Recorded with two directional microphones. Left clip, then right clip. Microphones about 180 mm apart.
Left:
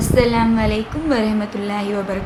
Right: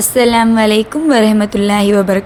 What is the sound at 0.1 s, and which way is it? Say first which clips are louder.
A woman's voice: right 6 dB; 45° right (ahead or behind).